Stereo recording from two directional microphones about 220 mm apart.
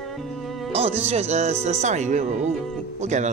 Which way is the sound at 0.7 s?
25° right (ahead or behind).